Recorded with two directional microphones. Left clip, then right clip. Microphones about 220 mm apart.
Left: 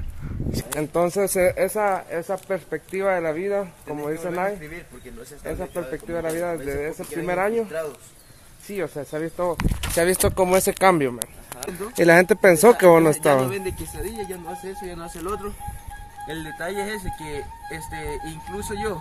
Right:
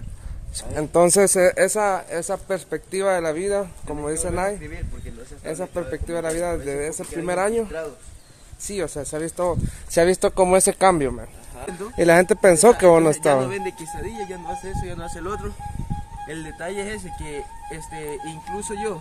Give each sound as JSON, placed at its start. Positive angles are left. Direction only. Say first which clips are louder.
{"t": 1.0, "sound": "speech", "louder": "right 7 dB", "side_deg": -45}
{"t": 1.3, "sound": "speech", "louder": "right 3 dB", "side_deg": -20}